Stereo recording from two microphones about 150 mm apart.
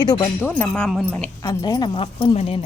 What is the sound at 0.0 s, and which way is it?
Speech, 30° left (ahead or behind).